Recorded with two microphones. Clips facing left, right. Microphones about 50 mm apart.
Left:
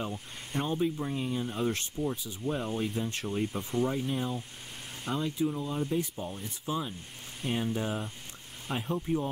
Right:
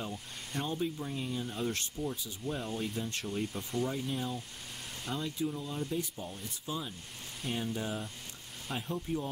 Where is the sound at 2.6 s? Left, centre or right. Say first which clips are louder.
Left 4 dB; left.